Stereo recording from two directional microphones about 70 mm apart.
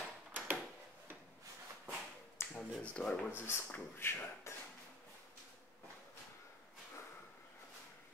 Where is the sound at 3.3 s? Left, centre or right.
Left.